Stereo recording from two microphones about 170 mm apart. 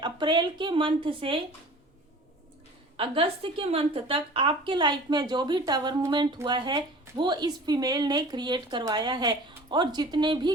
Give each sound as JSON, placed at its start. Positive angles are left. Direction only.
{"t": 0.0, "sound": "a woman's voice", "side_deg": -25}
{"t": 3.0, "sound": "a woman's voice", "side_deg": -30}